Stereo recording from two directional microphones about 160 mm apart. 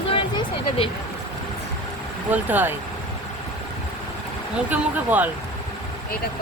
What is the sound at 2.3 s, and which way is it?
Speech, 10° right (ahead or behind).